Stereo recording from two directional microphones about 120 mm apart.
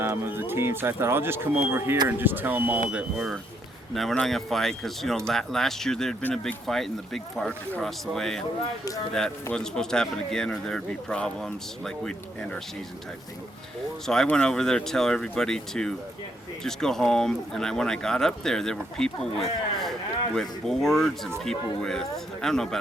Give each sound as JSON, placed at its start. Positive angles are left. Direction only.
{"t": 0.0, "sound": "speech", "side_deg": -20}
{"t": 3.9, "sound": "a man's voice", "side_deg": 5}
{"t": 14.1, "sound": "a man's voice", "side_deg": 5}